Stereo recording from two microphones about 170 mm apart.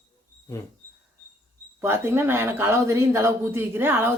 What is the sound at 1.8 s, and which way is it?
Speech, 15° right (ahead or behind).